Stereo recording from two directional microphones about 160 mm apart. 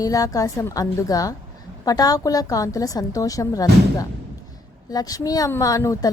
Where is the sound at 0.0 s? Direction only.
20° left (ahead or behind).